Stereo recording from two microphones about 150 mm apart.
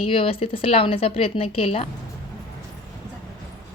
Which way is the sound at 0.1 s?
35° left (ahead or behind).